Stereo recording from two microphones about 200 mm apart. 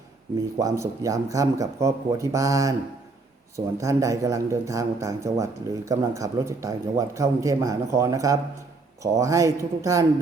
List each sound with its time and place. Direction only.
0.6 s a man's voice: 15° right (ahead or behind)